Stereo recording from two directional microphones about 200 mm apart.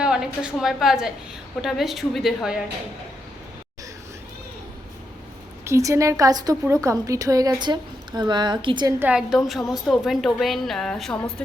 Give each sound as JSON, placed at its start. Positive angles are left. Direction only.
{"t": 0.0, "sound": "a woman's voice", "side_deg": -5}
{"t": 5.6, "sound": "a woman's voice", "side_deg": -15}
{"t": 9.0, "sound": "a woman's voice", "side_deg": -5}